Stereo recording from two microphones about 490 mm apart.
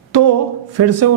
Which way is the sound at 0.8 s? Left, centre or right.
Right.